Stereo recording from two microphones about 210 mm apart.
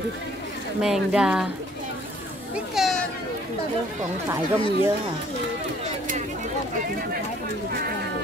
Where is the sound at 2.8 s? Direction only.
Centre (ahead or behind).